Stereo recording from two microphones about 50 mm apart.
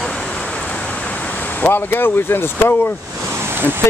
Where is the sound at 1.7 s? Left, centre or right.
Left.